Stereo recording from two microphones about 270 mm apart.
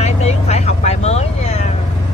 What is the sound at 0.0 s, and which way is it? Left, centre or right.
Vehicle, left.